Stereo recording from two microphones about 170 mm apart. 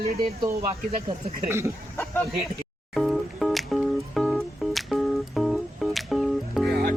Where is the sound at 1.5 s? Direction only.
15° right (ahead or behind).